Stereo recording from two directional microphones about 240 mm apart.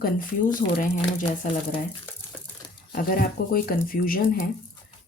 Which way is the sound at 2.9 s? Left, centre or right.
Left.